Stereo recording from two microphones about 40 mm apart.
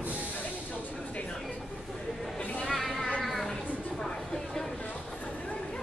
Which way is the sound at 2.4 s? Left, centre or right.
Left.